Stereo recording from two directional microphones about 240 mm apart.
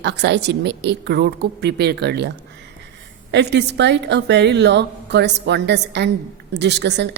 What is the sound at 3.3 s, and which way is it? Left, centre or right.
A woman's voice, right.